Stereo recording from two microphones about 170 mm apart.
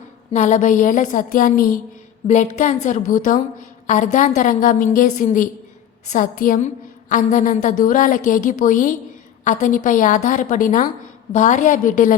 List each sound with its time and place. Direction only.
0.3 s a woman's voice: 45° left (ahead or behind)